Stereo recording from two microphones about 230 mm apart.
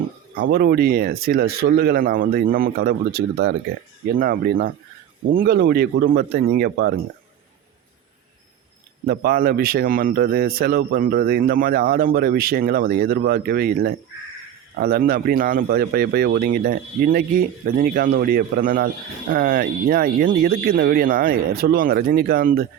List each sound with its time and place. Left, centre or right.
0.4 s a man's voice: right
9.0 s a man's voice: right